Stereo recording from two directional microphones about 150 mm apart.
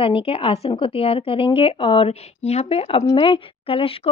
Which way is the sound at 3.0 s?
30° left (ahead or behind).